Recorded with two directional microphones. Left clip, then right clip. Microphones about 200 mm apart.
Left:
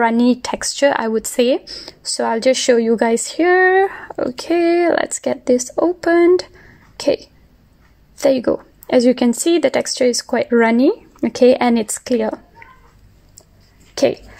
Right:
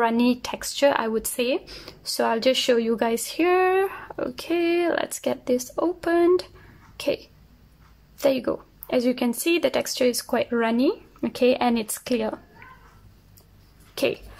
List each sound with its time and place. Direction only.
0.0 s speech: 20° left (ahead or behind)
13.9 s speech: 20° left (ahead or behind)